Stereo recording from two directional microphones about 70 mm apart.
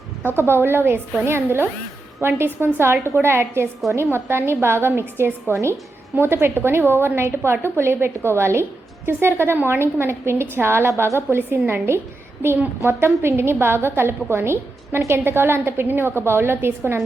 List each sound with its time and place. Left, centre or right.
0.3 s a woman's voice: right